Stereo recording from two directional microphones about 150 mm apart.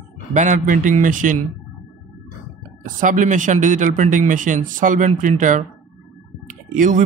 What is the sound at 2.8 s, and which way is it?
Speech, 60° right (ahead or behind).